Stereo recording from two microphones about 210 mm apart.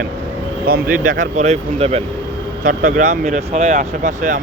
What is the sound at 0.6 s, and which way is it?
Speech, 45° right (ahead or behind).